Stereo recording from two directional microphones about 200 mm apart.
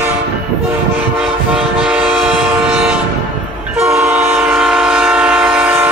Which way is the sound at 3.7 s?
10° right (ahead or behind).